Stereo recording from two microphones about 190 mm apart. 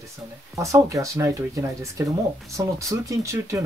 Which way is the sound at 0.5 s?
15° right (ahead or behind).